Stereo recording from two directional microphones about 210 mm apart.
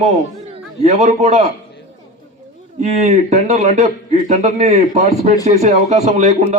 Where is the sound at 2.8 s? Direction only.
35° right (ahead or behind).